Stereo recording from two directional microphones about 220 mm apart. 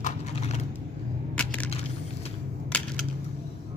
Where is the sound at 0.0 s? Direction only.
30° left (ahead or behind).